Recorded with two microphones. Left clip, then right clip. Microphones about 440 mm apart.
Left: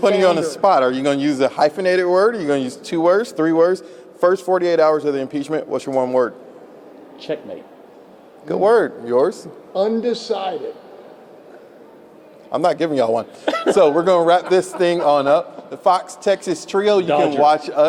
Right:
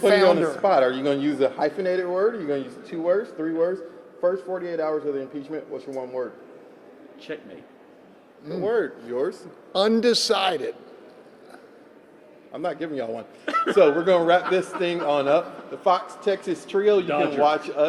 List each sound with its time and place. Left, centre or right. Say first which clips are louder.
0.5 s speech: left 5 dB; left
1.9 s speech: left 8 dB; left
7.3 s speech: left 10 dB; left
8.6 s speech: left 10 dB; left
9.7 s a man's voice: left 1 dB; right
12.5 s speech: left 11 dB; left